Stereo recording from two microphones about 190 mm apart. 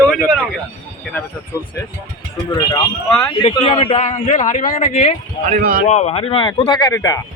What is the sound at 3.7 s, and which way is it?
A man's voice, 30° left (ahead or behind).